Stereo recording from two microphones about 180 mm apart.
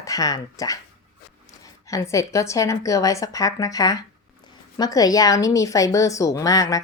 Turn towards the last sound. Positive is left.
turn(degrees=20)  # may be behind; listen again after turning